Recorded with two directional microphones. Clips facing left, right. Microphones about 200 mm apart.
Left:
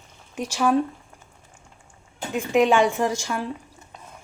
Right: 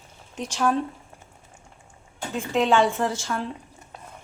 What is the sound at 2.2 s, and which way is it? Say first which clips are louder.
Speech: left 4 dB; 15° left (ahead or behind).